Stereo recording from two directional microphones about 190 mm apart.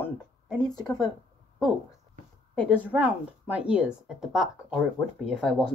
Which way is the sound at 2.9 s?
5° right (ahead or behind).